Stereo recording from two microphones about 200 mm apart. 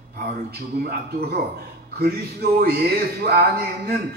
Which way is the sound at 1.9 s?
50° right (ahead or behind).